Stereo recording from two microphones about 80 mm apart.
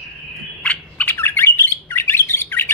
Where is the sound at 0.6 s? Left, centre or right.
Centre.